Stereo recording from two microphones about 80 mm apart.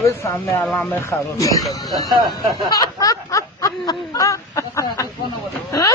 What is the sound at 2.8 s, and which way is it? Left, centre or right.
Snicker, left.